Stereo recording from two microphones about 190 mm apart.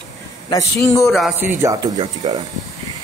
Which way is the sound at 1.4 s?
15° right (ahead or behind).